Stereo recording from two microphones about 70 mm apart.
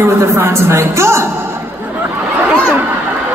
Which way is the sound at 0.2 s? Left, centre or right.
Right.